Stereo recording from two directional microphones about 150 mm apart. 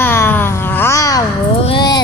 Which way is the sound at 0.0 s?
15° left (ahead or behind).